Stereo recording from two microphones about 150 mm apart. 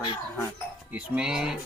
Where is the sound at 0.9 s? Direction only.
10° right (ahead or behind).